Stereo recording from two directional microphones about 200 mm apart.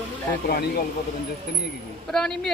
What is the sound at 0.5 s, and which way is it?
Speech, 50° left (ahead or behind).